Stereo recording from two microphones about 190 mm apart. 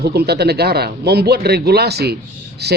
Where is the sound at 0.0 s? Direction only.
55° right (ahead or behind).